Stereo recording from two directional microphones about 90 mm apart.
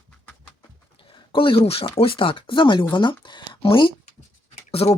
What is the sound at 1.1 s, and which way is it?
Speech, 70° left (ahead or behind).